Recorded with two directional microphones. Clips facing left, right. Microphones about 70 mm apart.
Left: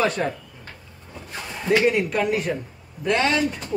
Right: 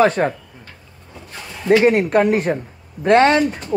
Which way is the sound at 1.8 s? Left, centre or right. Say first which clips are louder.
Right 6 dB; right.